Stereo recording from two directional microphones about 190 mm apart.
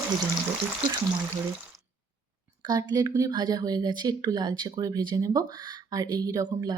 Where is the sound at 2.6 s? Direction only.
20° right (ahead or behind).